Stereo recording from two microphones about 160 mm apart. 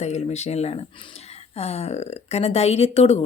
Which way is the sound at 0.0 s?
45° left (ahead or behind).